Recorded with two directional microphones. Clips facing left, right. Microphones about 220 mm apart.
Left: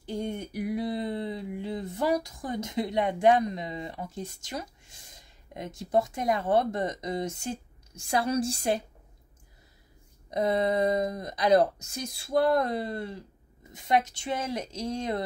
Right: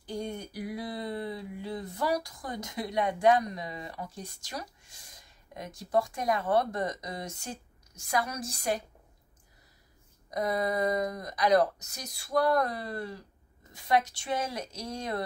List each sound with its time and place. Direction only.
0.0 s speech: 25° left (ahead or behind)
10.3 s speech: 25° left (ahead or behind)